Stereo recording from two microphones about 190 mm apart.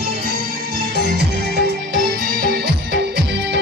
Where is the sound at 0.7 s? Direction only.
65° right (ahead or behind).